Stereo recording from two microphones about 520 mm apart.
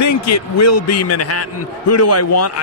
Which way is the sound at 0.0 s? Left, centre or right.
Left.